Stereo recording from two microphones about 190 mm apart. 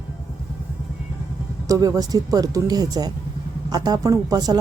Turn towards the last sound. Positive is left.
turn(degrees=-20)  # may be behind; listen again after turning